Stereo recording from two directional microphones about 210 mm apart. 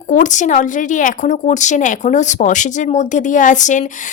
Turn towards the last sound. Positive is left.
turn(degrees=35)  # may be behind; listen again after turning